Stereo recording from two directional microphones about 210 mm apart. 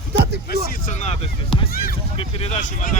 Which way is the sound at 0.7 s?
35° left (ahead or behind).